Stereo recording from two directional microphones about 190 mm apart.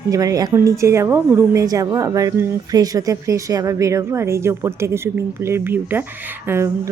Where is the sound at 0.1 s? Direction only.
15° right (ahead or behind).